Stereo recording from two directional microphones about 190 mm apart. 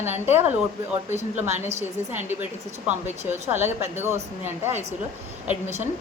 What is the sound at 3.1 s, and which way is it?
A woman's voice, 10° right (ahead or behind).